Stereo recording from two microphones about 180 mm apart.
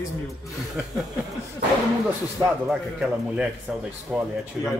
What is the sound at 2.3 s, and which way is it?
Speech, 10° right (ahead or behind).